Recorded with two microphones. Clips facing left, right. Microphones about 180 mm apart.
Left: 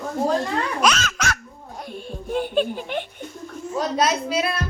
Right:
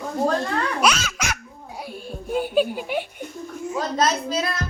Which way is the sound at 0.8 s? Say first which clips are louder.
Left 1 dB; 10° right (ahead or behind).